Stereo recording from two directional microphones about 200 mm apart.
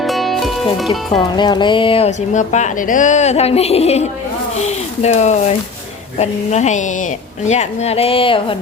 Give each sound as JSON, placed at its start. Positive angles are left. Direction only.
{"t": 0.0, "sound": "music", "side_deg": 0}
{"t": 1.4, "sound": "speech", "side_deg": 20}